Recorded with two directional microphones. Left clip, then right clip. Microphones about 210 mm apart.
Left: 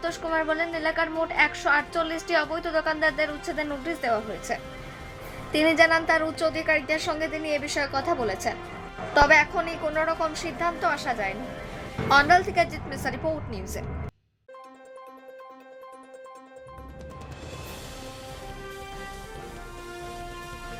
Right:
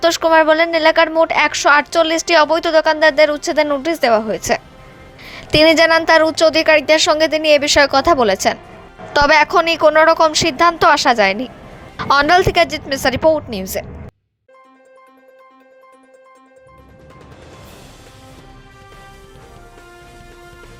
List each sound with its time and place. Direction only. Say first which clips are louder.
0.0 s a woman's voice: right 15 dB; 45° right (ahead or behind)